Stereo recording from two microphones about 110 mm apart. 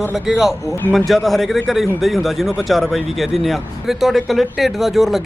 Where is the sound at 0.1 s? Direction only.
Centre (ahead or behind).